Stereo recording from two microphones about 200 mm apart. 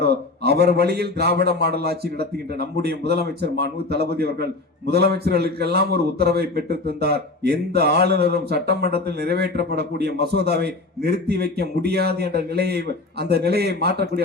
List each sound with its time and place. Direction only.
0.0 s a man's voice: 55° right (ahead or behind)